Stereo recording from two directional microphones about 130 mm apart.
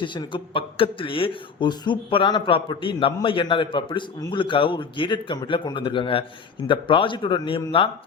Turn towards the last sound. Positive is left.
turn(degrees=40)  # may be behind; listen again after turning